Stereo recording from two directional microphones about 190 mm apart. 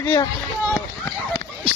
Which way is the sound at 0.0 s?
20° left (ahead or behind).